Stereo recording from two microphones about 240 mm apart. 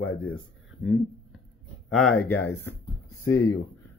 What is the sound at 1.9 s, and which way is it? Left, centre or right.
Speech, centre.